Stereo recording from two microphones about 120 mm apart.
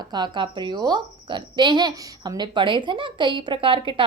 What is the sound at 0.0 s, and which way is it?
A woman's voice, 35° right (ahead or behind).